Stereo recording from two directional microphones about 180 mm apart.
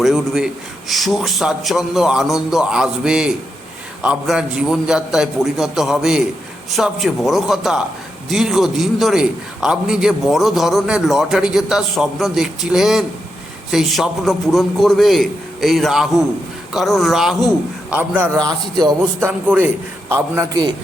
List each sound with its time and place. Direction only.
0.0 s a man's voice: centre (ahead or behind)
18.4 s a man's voice: 20° right (ahead or behind)
19.5 s a man's voice: 10° right (ahead or behind)